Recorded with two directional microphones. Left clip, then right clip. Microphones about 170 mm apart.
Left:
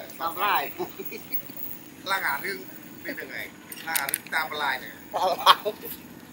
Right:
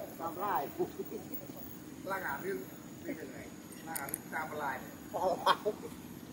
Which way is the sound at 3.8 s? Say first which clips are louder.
Left 13 dB; 15° right (ahead or behind).